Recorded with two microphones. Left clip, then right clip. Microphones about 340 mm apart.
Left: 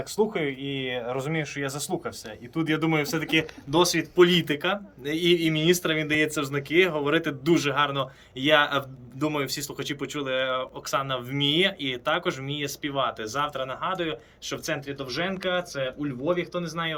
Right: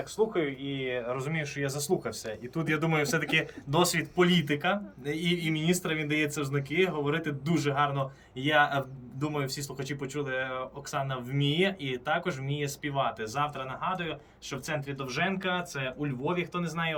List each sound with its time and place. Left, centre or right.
0.2 s speech: left; by 17.0 s centre